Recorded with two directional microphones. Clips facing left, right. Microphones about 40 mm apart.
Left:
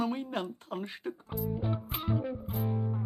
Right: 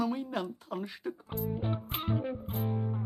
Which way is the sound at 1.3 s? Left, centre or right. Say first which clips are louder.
Left 1 dB; right.